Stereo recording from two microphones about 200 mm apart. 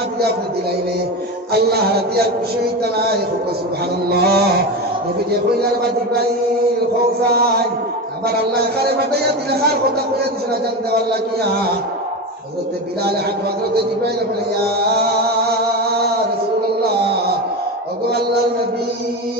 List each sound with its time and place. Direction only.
1.5 s a man's voice: 50° right (ahead or behind)
5.6 s a man's voice: 50° right (ahead or behind)
7.2 s a man's voice: 55° right (ahead or behind)
14.6 s a man's voice: 50° right (ahead or behind)